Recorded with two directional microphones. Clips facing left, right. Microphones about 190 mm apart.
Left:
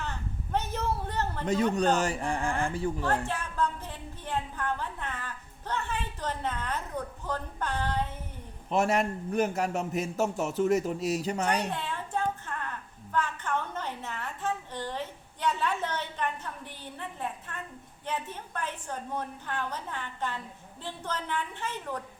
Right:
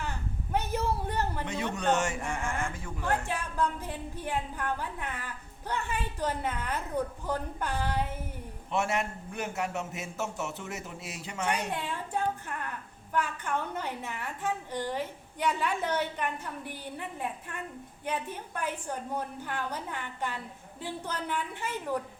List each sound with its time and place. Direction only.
0.0 s a sound: 10° right (ahead or behind)
1.5 s a man's voice: 35° left (ahead or behind)
3.2 s a woman's voice: 15° right (ahead or behind)
8.7 s a man's voice: 40° left (ahead or behind)
11.7 s a sound: 15° right (ahead or behind)
13.1 s a woman's voice: 10° right (ahead or behind)